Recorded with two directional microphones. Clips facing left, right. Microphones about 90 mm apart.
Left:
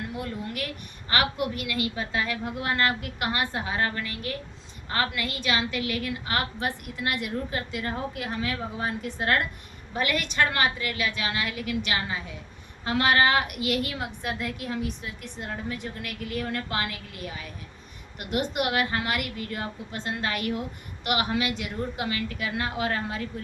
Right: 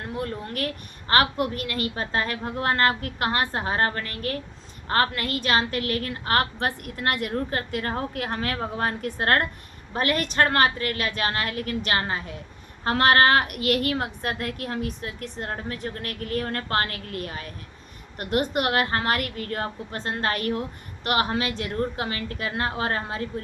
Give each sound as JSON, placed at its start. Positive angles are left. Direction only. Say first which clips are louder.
{"t": 0.0, "sound": "a woman's voice", "louder": "right 2 dB", "side_deg": -40}